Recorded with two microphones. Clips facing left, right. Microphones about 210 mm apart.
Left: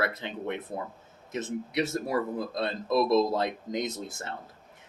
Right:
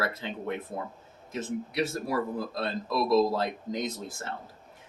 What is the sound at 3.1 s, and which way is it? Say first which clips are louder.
Speech: even; 20° left (ahead or behind).